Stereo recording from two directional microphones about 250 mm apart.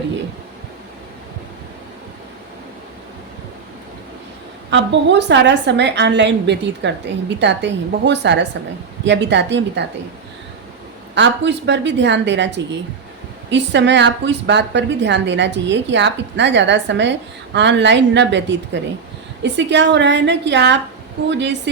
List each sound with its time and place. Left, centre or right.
4.7 s a woman's voice: right
11.1 s a woman's voice: right